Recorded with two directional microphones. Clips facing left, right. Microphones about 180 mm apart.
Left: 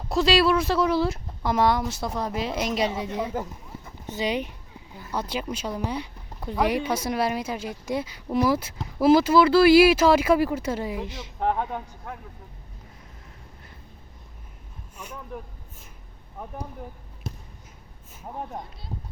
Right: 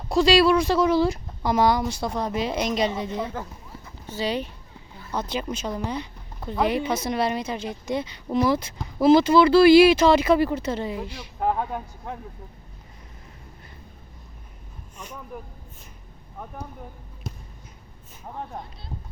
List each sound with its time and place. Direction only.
0.1 s speech: centre (ahead or behind); by 11.3 s 20° left (ahead or behind)
11.3 s speech: 5° right (ahead or behind)
12.1 s speech: 20° right (ahead or behind)
14.9 s speech: 10° left (ahead or behind)
18.2 s speech: 10° left (ahead or behind)